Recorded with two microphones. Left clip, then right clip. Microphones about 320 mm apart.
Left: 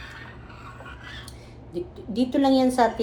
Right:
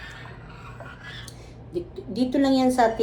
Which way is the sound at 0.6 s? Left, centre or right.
Centre.